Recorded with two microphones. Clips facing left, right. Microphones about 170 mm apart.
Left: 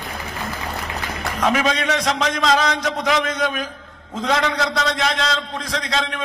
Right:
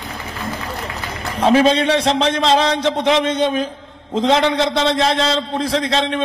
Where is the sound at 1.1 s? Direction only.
30° right (ahead or behind).